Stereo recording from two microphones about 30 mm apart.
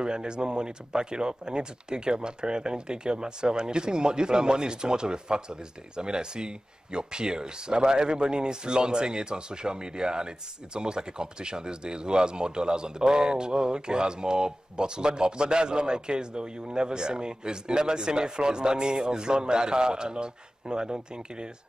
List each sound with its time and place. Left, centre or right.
0.0 s speech: right